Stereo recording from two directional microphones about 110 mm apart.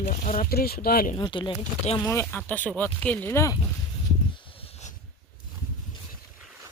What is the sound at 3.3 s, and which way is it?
Speech, 25° left (ahead or behind).